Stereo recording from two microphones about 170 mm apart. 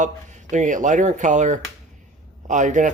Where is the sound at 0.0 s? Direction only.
45° right (ahead or behind).